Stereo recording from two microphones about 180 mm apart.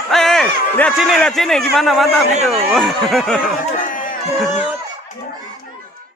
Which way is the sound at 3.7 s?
45° left (ahead or behind).